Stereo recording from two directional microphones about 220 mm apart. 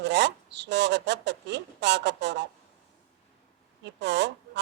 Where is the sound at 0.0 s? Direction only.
50° right (ahead or behind).